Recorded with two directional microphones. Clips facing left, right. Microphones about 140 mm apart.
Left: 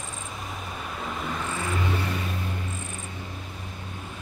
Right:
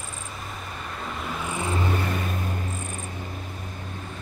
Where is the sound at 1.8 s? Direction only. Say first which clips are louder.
Right 2 dB; 50° right (ahead or behind).